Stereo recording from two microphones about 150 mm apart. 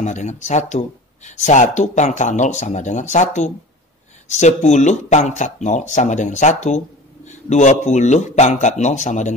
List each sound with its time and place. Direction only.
0.0 s speech: 50° left (ahead or behind)